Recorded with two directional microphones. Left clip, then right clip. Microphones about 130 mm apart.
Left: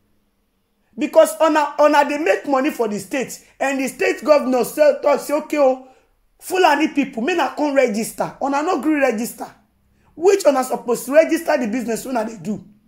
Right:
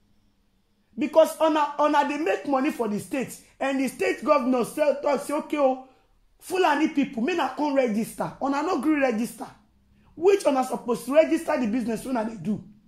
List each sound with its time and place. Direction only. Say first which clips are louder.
0.9 s speech: left 6 dB; 25° left (ahead or behind)